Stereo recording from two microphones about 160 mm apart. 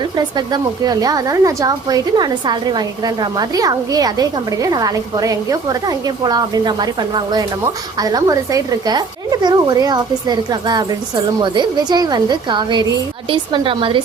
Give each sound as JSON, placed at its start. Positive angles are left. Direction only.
{"t": 0.2, "sound": "a woman's voice", "side_deg": -25}